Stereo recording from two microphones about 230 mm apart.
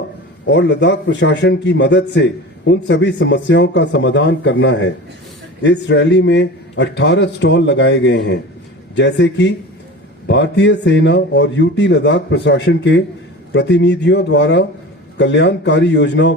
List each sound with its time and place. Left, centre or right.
0.4 s a man's voice: left